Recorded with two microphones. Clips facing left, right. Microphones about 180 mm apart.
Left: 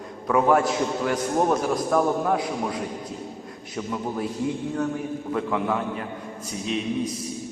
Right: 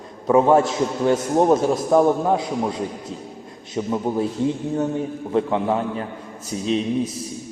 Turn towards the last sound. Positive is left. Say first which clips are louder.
# right 6 dB
turn(degrees=-30)  # may be behind; listen again after turning